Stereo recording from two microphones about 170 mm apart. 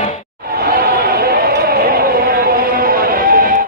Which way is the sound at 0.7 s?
65° right (ahead or behind).